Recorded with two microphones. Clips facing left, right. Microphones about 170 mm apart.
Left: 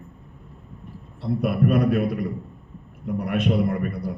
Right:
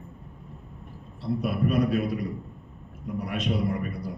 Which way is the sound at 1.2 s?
55° left (ahead or behind).